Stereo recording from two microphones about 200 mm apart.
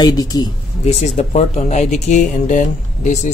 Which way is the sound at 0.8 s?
35° left (ahead or behind).